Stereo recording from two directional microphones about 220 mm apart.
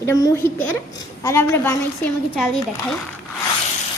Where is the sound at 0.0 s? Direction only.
15° left (ahead or behind).